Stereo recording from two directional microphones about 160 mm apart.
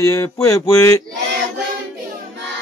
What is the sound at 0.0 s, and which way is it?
Mantra, 20° left (ahead or behind).